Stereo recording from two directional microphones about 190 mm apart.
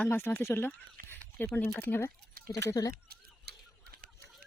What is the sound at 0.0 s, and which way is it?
Speech, 10° left (ahead or behind).